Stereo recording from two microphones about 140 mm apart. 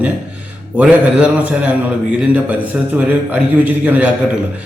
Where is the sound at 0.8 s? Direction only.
10° right (ahead or behind).